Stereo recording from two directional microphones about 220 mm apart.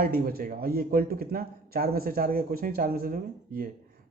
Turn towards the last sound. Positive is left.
turn(degrees=-40)  # may be behind; listen again after turning